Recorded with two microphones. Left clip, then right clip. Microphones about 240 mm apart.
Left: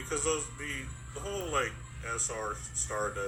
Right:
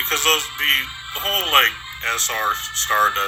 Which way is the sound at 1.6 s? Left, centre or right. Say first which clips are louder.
Right 17 dB; right.